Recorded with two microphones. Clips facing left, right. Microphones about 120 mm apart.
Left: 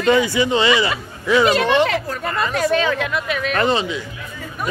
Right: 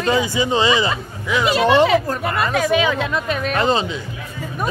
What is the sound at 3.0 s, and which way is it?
Speech, 30° right (ahead or behind).